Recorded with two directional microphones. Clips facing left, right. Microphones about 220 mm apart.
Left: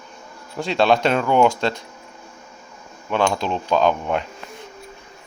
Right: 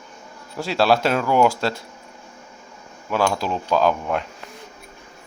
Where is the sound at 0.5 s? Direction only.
5° right (ahead or behind).